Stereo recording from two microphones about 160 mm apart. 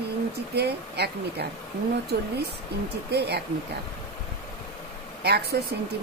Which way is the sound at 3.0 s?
90° right.